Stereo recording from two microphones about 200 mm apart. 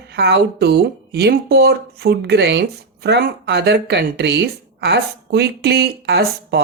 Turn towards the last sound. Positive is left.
turn(degrees=-55)  # may be behind; listen again after turning